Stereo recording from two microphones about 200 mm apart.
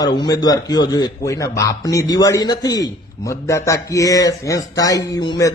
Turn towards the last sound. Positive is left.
turn(degrees=20)  # may be behind; listen again after turning